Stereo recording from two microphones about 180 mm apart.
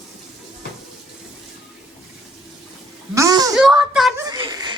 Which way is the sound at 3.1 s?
20° right (ahead or behind).